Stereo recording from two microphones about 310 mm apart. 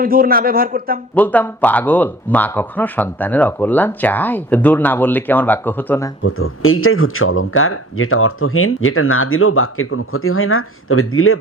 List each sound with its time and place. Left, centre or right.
0.0 s a man's voice: right
1.1 s speech: centre
6.2 s speech: left